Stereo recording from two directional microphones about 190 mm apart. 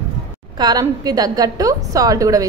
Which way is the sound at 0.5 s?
20° right (ahead or behind).